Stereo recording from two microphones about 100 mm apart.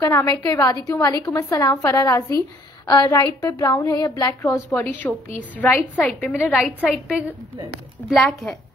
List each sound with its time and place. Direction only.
0.0 s a woman's voice: 30° left (ahead or behind)
4.7 s a woman's voice: 15° left (ahead or behind)
6.6 s a woman's voice: 5° right (ahead or behind)